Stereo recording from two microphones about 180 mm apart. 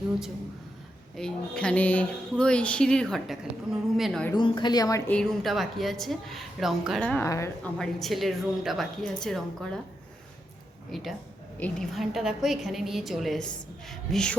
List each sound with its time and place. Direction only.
1.1 s a woman's voice: 5° left (ahead or behind)
4.4 s a woman's voice: 25° left (ahead or behind)
5.1 s a woman's voice: 5° left (ahead or behind)
7.3 s a woman's voice: 15° left (ahead or behind)
7.6 s a woman's voice: centre (ahead or behind)
10.9 s a woman's voice: centre (ahead or behind)